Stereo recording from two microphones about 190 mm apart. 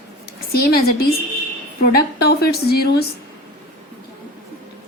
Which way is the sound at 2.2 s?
55° left (ahead or behind).